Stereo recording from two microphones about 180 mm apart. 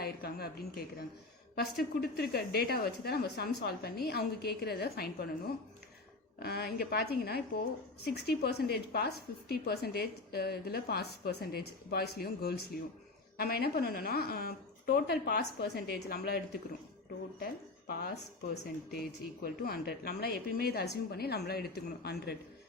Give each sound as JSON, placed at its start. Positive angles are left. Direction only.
{"t": 0.0, "sound": "a woman's voice", "side_deg": 60}
{"t": 6.4, "sound": "a woman's voice", "side_deg": 60}
{"t": 17.4, "sound": "a woman's voice", "side_deg": 60}